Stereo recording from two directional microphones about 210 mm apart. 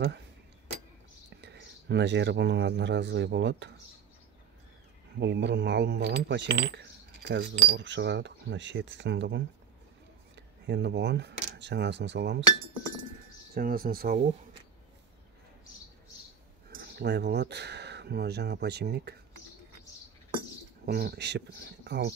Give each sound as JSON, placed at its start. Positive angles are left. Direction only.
{"t": 1.4, "sound": "speech", "side_deg": -55}
{"t": 5.2, "sound": "speech", "side_deg": -55}
{"t": 13.6, "sound": "speech", "side_deg": -45}
{"t": 16.7, "sound": "speech", "side_deg": -55}
{"t": 20.8, "sound": "speech", "side_deg": -50}